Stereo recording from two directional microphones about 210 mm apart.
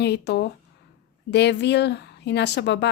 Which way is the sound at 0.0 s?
50° left (ahead or behind).